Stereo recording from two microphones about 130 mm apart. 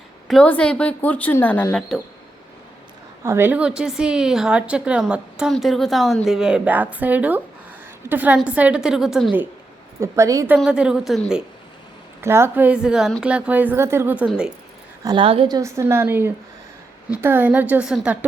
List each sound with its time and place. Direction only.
0.4 s a woman's voice: 10° left (ahead or behind)
3.2 s a woman's voice: 15° right (ahead or behind)
10.0 s a woman's voice: 25° right (ahead or behind)
10.6 s a woman's voice: 5° right (ahead or behind)
12.2 s a woman's voice: 20° right (ahead or behind)
15.0 s a woman's voice: 40° right (ahead or behind)
15.4 s a woman's voice: 25° right (ahead or behind); by 18.3 s 10° right (ahead or behind)